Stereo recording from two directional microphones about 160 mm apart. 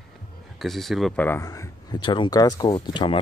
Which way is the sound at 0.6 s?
Centre (ahead or behind).